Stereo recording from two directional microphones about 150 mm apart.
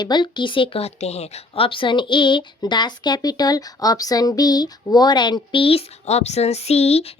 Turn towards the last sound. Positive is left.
turn(degrees=45)  # may be behind; listen again after turning